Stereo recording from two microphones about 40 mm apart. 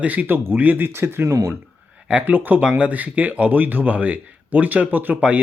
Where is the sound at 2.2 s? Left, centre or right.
Right.